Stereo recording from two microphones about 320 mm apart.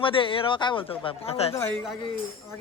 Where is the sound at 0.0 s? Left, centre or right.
Centre.